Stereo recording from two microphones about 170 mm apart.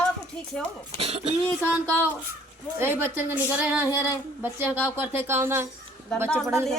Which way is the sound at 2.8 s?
10° right (ahead or behind).